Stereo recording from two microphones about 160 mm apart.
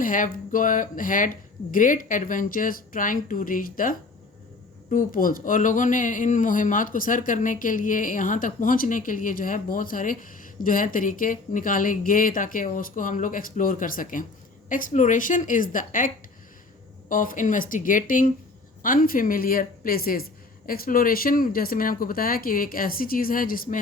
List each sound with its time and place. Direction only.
0.0 s speech: 60° left (ahead or behind)